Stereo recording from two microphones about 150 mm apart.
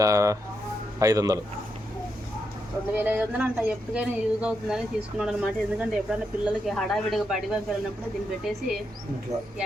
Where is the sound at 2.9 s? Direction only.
10° right (ahead or behind).